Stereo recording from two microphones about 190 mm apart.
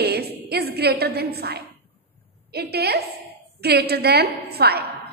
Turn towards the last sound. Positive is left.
turn(degrees=-55)  # may be behind; listen again after turning